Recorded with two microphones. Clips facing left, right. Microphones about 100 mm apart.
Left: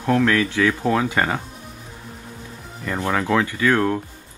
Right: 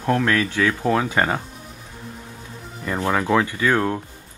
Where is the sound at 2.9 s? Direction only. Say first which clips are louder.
Right 1 dB; 15° right (ahead or behind).